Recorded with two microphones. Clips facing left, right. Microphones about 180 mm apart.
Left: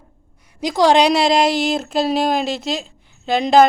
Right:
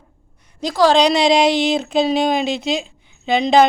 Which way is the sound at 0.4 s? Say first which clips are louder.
Even; 15° left (ahead or behind).